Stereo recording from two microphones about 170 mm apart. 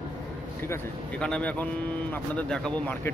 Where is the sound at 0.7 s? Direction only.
5° left (ahead or behind).